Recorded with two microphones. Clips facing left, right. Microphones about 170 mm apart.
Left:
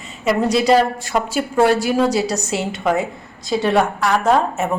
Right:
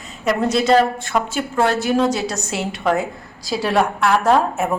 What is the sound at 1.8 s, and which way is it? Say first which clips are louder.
A woman's voice: left 1 dB; 5° left (ahead or behind).